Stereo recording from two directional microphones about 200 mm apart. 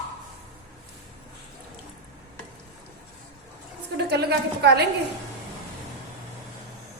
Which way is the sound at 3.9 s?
55° right (ahead or behind).